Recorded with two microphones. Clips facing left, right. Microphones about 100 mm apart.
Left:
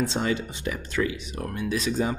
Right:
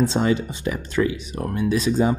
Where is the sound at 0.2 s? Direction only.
30° right (ahead or behind).